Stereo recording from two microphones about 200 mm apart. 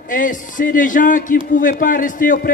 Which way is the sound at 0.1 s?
40° left (ahead or behind).